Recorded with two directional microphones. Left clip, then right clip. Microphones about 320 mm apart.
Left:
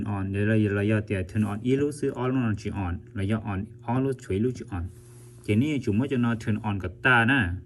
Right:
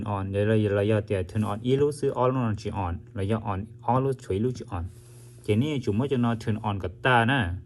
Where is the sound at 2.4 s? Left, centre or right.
Left.